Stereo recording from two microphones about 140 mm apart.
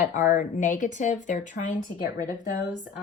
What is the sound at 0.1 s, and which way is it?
Speech, 65° left (ahead or behind).